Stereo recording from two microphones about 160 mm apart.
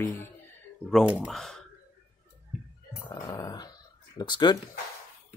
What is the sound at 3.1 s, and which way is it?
Speech, 25° left (ahead or behind).